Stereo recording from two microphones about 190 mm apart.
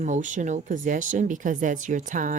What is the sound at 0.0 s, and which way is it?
Speech, 40° right (ahead or behind).